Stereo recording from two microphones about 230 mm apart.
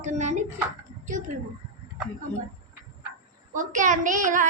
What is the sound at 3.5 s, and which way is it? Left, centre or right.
Speech, right.